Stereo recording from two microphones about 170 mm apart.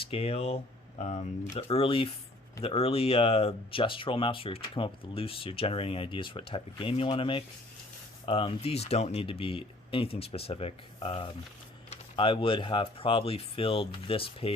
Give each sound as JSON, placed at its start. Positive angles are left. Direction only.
{"t": 0.0, "sound": "speech", "side_deg": 35}